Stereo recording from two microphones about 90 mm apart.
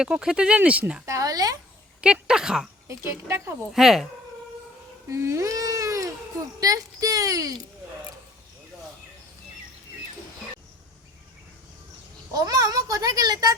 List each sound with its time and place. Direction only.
0.0 s speech: 10° right (ahead or behind)
1.0 s speech: 40° right (ahead or behind)
2.2 s speech: 5° right (ahead or behind)
2.8 s a woman's voice: 30° right (ahead or behind)
3.7 s speech: 5° right (ahead or behind)
5.0 s a child's voice: 30° right (ahead or behind)
12.3 s a child's voice: 45° right (ahead or behind)